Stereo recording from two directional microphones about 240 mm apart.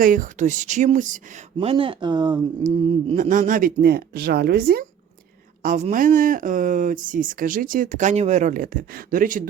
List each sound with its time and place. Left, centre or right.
0.0 s speech: right
1.5 s speech: right
2.6 s speech: right